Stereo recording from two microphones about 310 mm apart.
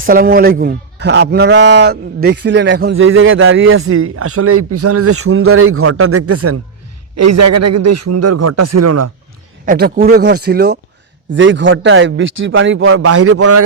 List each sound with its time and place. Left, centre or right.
0.0 s a man's voice: right
9.6 s a man's voice: right